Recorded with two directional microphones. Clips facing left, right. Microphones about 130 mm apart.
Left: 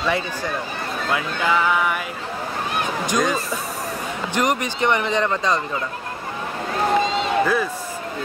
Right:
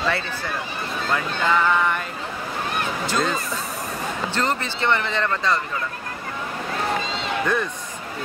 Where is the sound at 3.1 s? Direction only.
15° left (ahead or behind).